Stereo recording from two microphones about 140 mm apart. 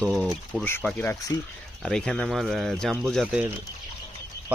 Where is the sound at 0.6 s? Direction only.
15° left (ahead or behind).